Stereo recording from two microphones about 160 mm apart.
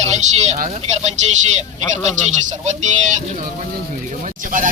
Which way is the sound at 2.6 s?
50° right (ahead or behind).